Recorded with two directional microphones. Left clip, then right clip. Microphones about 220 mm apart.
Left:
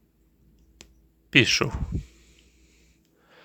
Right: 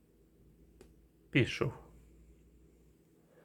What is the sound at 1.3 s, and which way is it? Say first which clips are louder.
Speech: left 13 dB; 20° left (ahead or behind).